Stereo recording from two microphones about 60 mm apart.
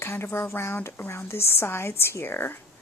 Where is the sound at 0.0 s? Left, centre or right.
Left.